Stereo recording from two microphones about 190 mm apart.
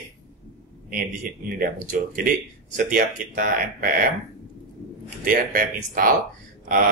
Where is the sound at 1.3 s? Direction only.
50° right (ahead or behind).